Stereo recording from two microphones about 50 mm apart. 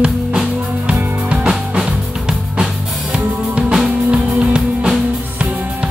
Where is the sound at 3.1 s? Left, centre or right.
Centre.